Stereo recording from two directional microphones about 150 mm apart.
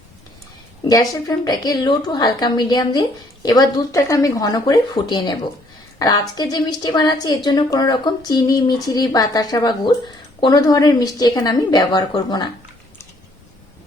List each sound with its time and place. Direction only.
0.9 s a woman's voice: 25° left (ahead or behind)